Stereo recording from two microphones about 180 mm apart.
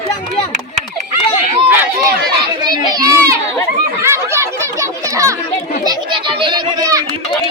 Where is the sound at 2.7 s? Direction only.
20° right (ahead or behind).